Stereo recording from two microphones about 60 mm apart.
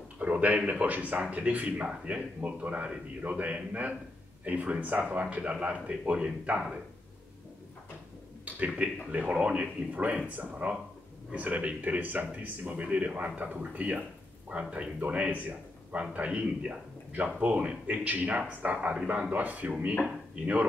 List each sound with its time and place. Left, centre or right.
0.2 s speech: right
8.5 s speech: right